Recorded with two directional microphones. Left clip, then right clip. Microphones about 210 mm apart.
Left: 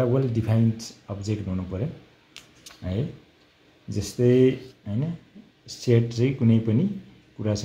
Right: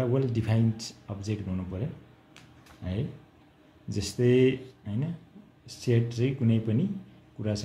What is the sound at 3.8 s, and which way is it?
Speech, 10° left (ahead or behind).